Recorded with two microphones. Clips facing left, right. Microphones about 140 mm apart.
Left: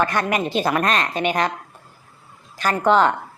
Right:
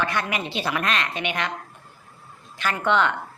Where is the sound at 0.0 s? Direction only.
45° left (ahead or behind).